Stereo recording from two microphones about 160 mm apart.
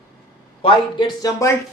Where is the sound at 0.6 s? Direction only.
25° left (ahead or behind).